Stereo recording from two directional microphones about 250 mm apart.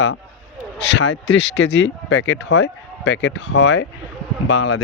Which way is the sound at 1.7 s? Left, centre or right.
Left.